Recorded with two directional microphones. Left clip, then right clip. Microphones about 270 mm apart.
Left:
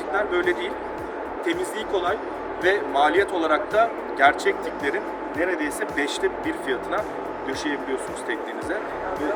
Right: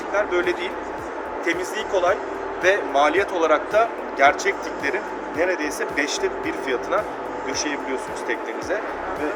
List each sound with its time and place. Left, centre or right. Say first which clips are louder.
0.1 s speech: right 2 dB; centre
2.6 s speech: right 2 dB; centre